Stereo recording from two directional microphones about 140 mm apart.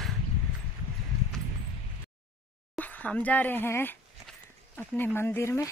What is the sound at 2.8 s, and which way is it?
Speech, 10° left (ahead or behind).